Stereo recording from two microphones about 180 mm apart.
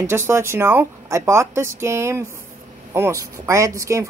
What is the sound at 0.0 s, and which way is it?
A woman's voice, 15° right (ahead or behind).